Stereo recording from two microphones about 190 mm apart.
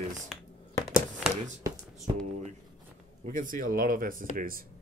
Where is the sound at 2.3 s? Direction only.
35° right (ahead or behind).